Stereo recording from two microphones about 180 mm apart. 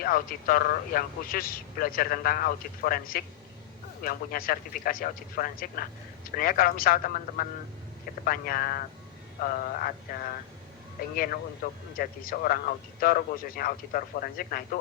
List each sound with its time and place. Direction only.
0.0 s a man's voice: 55° left (ahead or behind)